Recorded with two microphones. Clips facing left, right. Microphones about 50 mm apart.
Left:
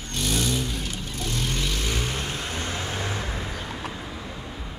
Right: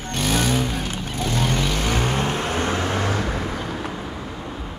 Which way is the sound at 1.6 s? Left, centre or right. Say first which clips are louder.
Right 6 dB; right.